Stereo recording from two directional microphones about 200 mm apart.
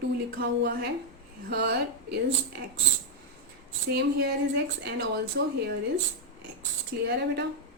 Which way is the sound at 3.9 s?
55° right (ahead or behind).